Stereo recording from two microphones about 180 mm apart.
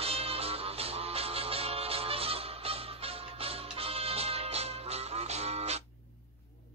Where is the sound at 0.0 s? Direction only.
35° right (ahead or behind).